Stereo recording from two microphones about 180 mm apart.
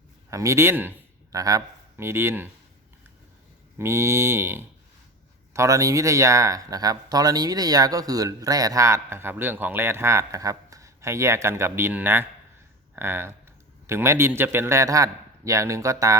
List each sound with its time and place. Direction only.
0.3 s a man's voice: 15° right (ahead or behind)
3.8 s speech: 15° right (ahead or behind)